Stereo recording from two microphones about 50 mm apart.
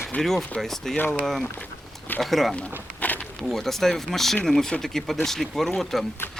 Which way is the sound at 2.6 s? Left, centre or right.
Left.